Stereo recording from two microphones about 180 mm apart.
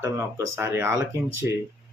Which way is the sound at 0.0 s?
15° right (ahead or behind).